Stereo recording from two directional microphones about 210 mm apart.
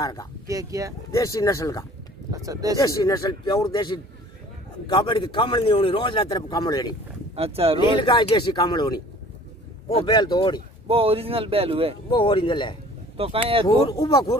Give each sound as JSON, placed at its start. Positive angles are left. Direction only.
{"t": 0.0, "sound": "speech", "side_deg": 15}
{"t": 0.5, "sound": "speech", "side_deg": -15}
{"t": 1.1, "sound": "speech", "side_deg": 15}
{"t": 2.3, "sound": "speech", "side_deg": -15}
{"t": 2.8, "sound": "a man's voice", "side_deg": 15}
{"t": 7.3, "sound": "speech", "side_deg": -30}
{"t": 8.0, "sound": "a man's voice", "side_deg": 20}
{"t": 10.9, "sound": "speech", "side_deg": -25}
{"t": 12.1, "sound": "a man's voice", "side_deg": 20}
{"t": 13.2, "sound": "speech", "side_deg": -25}
{"t": 13.7, "sound": "speech", "side_deg": 15}